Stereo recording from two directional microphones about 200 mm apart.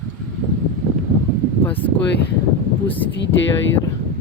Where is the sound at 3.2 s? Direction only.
65° left (ahead or behind).